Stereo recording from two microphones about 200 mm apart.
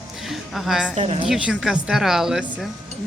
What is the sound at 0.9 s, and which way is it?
Speech, 35° right (ahead or behind).